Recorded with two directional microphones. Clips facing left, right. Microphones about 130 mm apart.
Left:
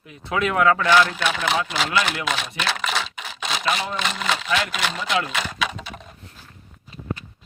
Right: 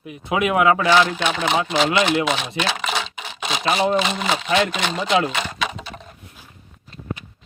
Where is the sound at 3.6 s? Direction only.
40° right (ahead or behind).